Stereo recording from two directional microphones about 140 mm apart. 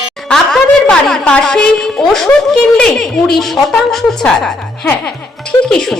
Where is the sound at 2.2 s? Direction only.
10° left (ahead or behind).